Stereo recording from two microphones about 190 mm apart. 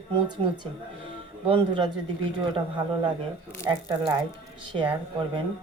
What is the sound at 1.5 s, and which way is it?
Speech, 25° right (ahead or behind).